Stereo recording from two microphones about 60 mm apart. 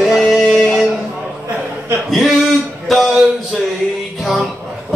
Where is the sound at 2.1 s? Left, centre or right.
Centre.